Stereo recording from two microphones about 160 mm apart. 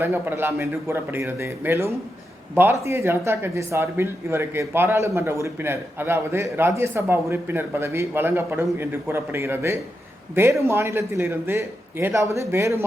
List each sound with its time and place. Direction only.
0.0 s speech: 15° right (ahead or behind)